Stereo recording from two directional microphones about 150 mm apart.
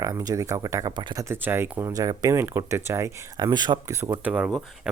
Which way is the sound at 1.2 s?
15° right (ahead or behind).